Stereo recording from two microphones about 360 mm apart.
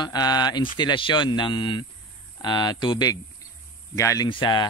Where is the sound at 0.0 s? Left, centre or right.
Centre.